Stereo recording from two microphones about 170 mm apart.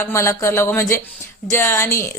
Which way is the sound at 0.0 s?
15° left (ahead or behind).